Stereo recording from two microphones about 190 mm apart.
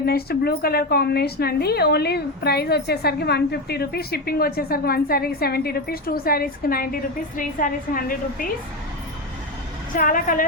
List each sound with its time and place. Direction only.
0.0 s a woman's voice: 55° left (ahead or behind)
9.9 s a woman's voice: 45° left (ahead or behind)